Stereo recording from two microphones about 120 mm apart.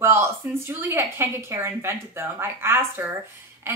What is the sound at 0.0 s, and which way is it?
A woman's voice, 20° right (ahead or behind).